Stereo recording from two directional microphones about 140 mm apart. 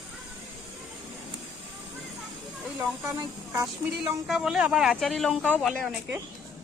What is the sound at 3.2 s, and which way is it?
Speech, 20° right (ahead or behind).